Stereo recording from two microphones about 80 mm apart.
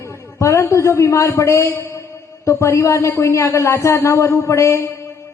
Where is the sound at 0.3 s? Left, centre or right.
Left.